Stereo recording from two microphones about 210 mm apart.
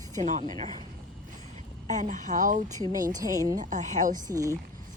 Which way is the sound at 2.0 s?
40° right (ahead or behind).